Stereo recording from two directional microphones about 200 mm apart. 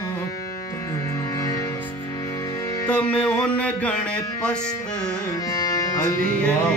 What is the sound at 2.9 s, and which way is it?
Speech, 5° left (ahead or behind).